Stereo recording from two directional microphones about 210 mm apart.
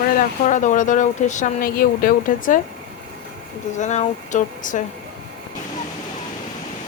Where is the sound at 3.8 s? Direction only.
35° left (ahead or behind).